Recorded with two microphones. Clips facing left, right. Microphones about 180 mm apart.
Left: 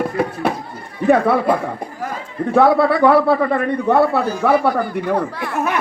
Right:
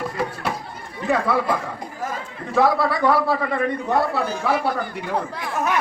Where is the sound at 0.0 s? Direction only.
60° left (ahead or behind).